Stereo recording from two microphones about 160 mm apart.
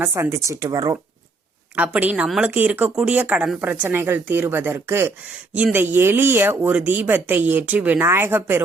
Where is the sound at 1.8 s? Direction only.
10° right (ahead or behind).